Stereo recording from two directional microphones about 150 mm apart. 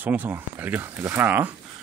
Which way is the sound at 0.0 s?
10° right (ahead or behind).